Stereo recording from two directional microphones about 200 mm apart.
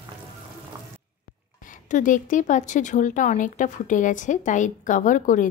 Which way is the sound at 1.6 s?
40° left (ahead or behind).